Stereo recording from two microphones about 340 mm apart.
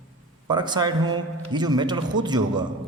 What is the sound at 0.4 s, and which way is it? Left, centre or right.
A man's voice, centre.